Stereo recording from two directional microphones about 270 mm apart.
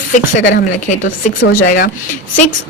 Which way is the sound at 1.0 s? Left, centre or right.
Left.